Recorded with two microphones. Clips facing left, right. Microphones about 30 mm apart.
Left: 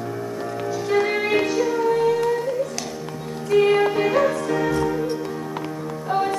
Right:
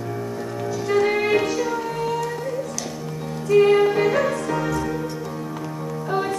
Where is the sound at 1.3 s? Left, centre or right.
Centre.